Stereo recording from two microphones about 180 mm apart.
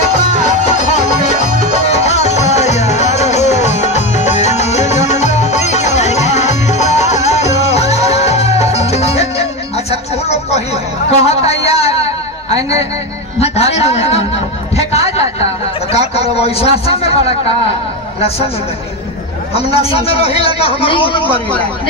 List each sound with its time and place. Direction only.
1.9 s music: 40° left (ahead or behind)
11.1 s a sound: 35° left (ahead or behind)
13.4 s a man's voice: 35° left (ahead or behind)
14.8 s a sound: 35° left (ahead or behind)
15.9 s a man's voice: 35° left (ahead or behind)
19.5 s a man's voice: 35° left (ahead or behind)